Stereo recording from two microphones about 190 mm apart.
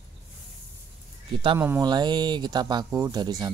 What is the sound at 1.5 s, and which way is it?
Speech, 15° right (ahead or behind).